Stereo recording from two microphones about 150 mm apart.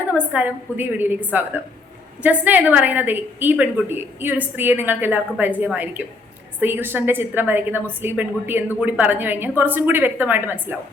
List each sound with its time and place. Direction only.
0.1 s a woman's voice: 10° right (ahead or behind)